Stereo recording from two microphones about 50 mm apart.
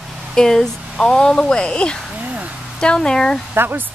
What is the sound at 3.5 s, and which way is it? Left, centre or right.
Speech, right.